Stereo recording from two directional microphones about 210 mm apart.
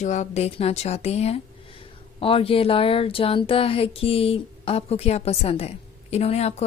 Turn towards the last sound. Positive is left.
turn(degrees=30)  # may be behind; listen again after turning